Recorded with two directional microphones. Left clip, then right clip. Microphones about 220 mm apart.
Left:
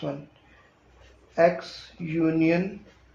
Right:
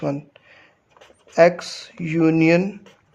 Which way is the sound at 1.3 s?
45° right (ahead or behind).